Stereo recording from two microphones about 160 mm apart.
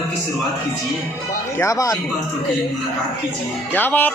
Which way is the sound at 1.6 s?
20° left (ahead or behind).